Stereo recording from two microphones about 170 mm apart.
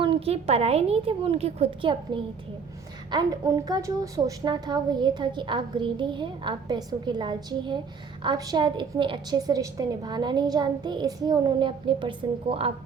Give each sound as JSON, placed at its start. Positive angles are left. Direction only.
{"t": 0.0, "sound": "a woman's voice", "side_deg": -35}